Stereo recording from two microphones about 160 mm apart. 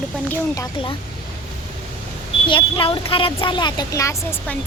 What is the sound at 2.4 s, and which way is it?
Speech, 35° left (ahead or behind).